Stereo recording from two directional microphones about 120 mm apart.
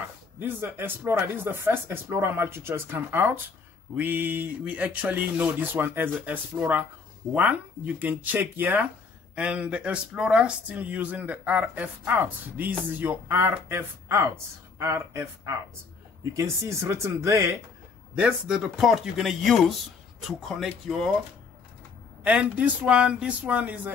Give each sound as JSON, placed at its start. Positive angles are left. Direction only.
{"t": 0.4, "sound": "speech", "side_deg": -15}
{"t": 18.1, "sound": "speech", "side_deg": -5}
{"t": 22.2, "sound": "speech", "side_deg": -10}